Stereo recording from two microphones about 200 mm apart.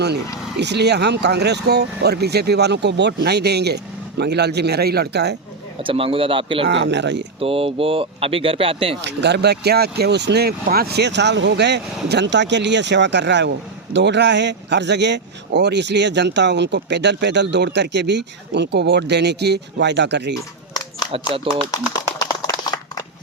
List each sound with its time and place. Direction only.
0.6 s speech: 55° right (ahead or behind)
5.8 s speech: 25° right (ahead or behind)
6.7 s speech: 60° right (ahead or behind)
7.3 s speech: 30° right (ahead or behind)
9.0 s speech: 60° right (ahead or behind)
21.5 s speech: 25° right (ahead or behind)
22.2 s a sound: 20° left (ahead or behind)